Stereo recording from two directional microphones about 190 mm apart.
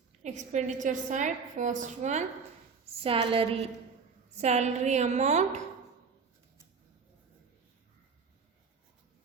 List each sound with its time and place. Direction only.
0.2 s a woman's voice: 40° right (ahead or behind)